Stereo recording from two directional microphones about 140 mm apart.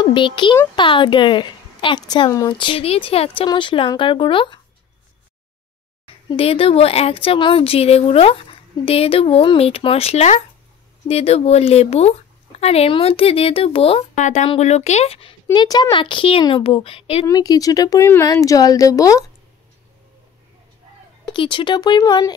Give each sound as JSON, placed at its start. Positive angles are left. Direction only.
{"t": 0.0, "sound": "a child's voice", "side_deg": 35}
{"t": 6.2, "sound": "a woman's voice", "side_deg": 40}
{"t": 14.1, "sound": "a woman's voice", "side_deg": 55}
{"t": 15.5, "sound": "a woman's voice", "side_deg": 30}
{"t": 17.3, "sound": "speech", "side_deg": 25}
{"t": 21.3, "sound": "a woman's voice", "side_deg": 35}